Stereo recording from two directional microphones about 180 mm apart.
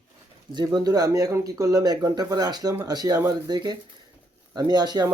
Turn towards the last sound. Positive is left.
turn(degrees=-20)  # may be behind; listen again after turning